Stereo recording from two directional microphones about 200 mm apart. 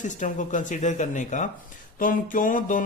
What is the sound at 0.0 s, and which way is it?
A man's voice, 40° left (ahead or behind).